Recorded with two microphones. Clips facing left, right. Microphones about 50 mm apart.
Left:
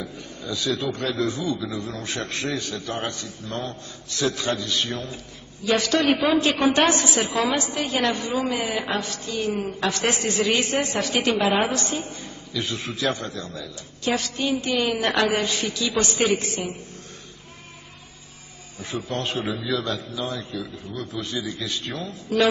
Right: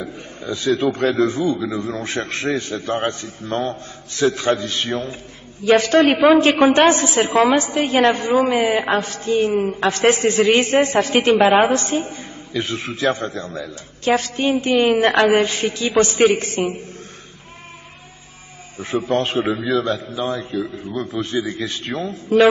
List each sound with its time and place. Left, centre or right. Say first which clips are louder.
0.0 s a man's voice: right 4 dB; right
6.0 s a man's voice: right 7 dB; right
6.3 s a man's voice: right 7 dB; right
18.8 s a man's voice: right 9 dB; right